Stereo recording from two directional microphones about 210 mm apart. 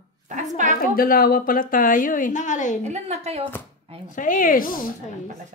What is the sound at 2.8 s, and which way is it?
Speech, 30° right (ahead or behind).